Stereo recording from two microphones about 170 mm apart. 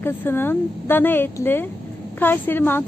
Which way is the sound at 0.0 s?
10° left (ahead or behind).